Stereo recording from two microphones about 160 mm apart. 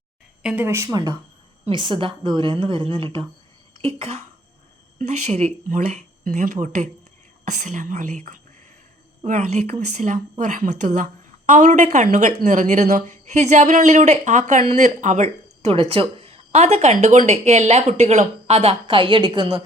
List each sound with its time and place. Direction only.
0.4 s speech: 10° right (ahead or behind)
1.7 s a woman's voice: 30° right (ahead or behind)